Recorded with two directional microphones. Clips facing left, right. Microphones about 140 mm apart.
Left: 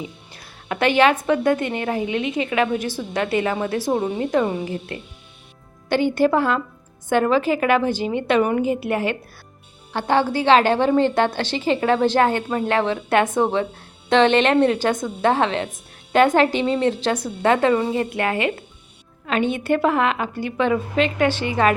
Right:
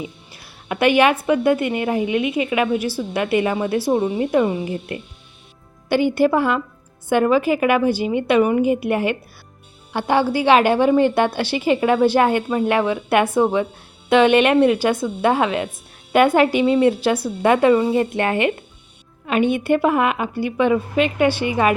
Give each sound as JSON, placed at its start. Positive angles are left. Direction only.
{"t": 0.4, "sound": "a woman's voice", "side_deg": -15}